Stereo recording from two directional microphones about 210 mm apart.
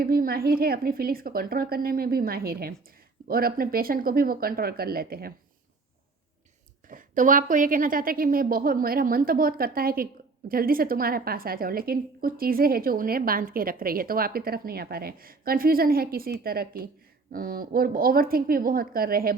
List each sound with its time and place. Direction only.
0.0 s a woman's voice: 45° right (ahead or behind)
6.8 s a woman's voice: 40° right (ahead or behind)